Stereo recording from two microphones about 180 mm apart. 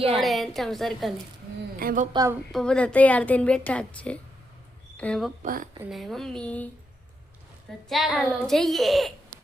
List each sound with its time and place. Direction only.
0.2 s a child's voice: centre (ahead or behind)
1.8 s speech: 50° right (ahead or behind)
2.1 s a woman's voice: 15° right (ahead or behind)
2.5 s a woman's voice: 5° left (ahead or behind)
5.4 s speech: 50° right (ahead or behind)
5.8 s a child's voice: centre (ahead or behind)
7.9 s a child's voice: centre (ahead or behind)